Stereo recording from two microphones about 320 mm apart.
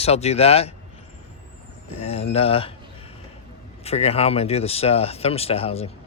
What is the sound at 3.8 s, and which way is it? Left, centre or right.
Speech, centre.